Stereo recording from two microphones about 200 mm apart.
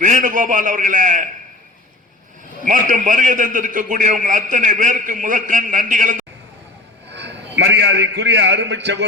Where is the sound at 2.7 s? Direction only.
40° right (ahead or behind).